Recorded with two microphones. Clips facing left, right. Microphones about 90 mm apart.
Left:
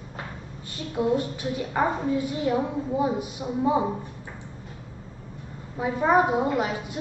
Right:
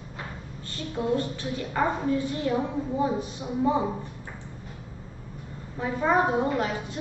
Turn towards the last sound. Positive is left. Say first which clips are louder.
# left 1 dB
turn(degrees=10)  # may be behind; listen again after turning